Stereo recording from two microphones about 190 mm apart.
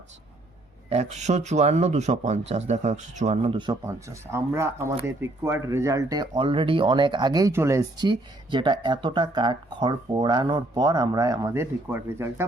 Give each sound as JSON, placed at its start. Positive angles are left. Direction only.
{"t": 0.9, "sound": "speech", "side_deg": -35}